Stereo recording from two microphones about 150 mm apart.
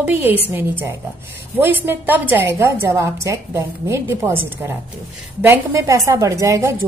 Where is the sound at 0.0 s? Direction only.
10° right (ahead or behind).